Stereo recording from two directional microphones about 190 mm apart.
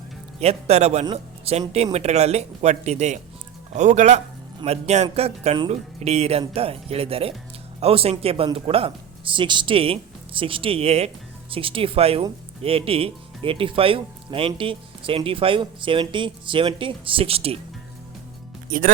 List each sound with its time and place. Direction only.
0.3 s speech: 35° right (ahead or behind)
18.7 s speech: 45° right (ahead or behind)